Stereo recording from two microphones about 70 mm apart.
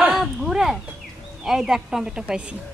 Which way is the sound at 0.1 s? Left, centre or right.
Centre.